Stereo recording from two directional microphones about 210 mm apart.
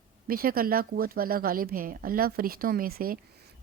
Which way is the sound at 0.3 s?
45° right (ahead or behind).